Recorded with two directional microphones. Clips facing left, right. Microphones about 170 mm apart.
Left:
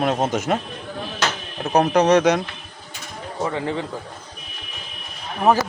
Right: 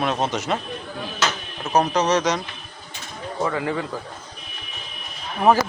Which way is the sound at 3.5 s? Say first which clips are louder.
Left 1 dB; 25° left (ahead or behind).